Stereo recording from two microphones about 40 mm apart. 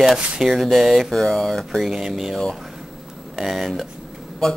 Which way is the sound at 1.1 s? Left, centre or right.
Centre.